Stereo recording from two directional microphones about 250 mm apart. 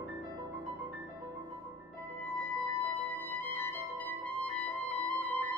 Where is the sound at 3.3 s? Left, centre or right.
Centre.